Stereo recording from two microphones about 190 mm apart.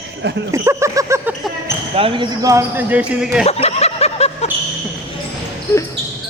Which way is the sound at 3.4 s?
35° left (ahead or behind).